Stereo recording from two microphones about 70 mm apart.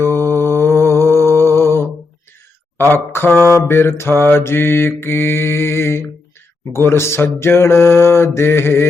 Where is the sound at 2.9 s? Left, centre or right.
Left.